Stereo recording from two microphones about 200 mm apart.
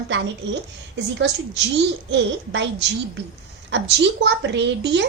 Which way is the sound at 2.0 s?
60° right (ahead or behind).